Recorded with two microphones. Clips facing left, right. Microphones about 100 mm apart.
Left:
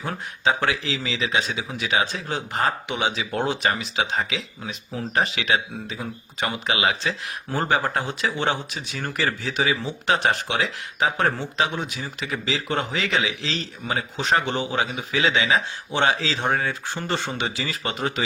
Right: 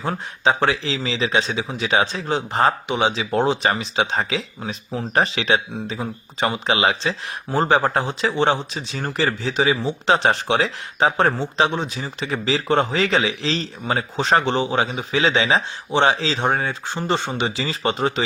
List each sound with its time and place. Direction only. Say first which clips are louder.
0.4 s a man's voice: right 3 dB; 35° right (ahead or behind)